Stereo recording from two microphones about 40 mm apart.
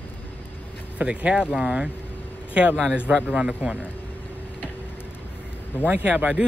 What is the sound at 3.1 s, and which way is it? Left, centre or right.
Speech, right.